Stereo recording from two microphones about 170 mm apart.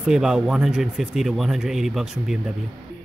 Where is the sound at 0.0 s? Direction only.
5° right (ahead or behind).